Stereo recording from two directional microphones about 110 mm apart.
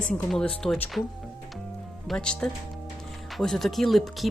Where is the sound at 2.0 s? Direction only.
10° left (ahead or behind).